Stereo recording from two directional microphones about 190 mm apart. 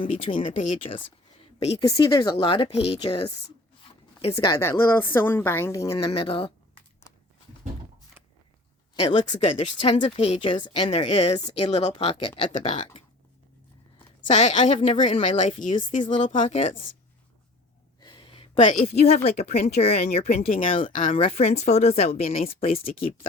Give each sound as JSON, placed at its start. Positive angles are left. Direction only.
{"t": 0.0, "sound": "a woman's voice", "side_deg": 25}
{"t": 1.8, "sound": "speech", "side_deg": 20}
{"t": 6.1, "sound": "speech", "side_deg": 30}
{"t": 9.0, "sound": "speech", "side_deg": 35}
{"t": 14.3, "sound": "speech", "side_deg": 40}
{"t": 16.6, "sound": "speech", "side_deg": 25}
{"t": 18.0, "sound": "speech", "side_deg": 25}